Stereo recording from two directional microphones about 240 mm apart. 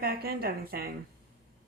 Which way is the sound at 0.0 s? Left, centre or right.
Right.